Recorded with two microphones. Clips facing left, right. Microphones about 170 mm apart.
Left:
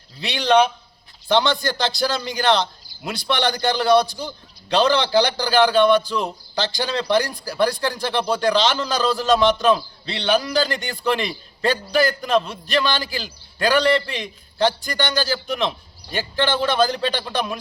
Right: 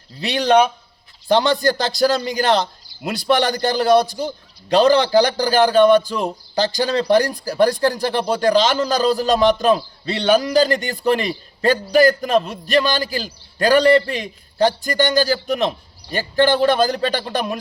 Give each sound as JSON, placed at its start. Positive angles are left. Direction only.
{"t": 0.2, "sound": "a man's voice", "side_deg": -40}